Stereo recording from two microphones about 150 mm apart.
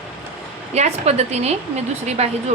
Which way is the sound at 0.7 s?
45° right (ahead or behind).